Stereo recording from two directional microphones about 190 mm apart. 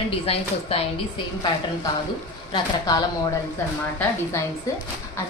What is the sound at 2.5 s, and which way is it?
Speech, 25° left (ahead or behind).